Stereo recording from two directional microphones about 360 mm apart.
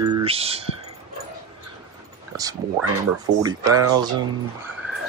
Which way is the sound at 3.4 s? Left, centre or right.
Centre.